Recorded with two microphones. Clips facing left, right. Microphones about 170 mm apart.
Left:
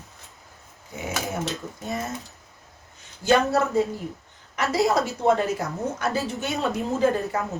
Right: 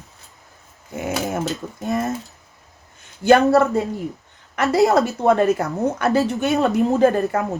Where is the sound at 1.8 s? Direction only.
65° right (ahead or behind).